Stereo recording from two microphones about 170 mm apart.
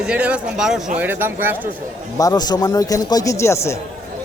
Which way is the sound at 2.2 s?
20° left (ahead or behind).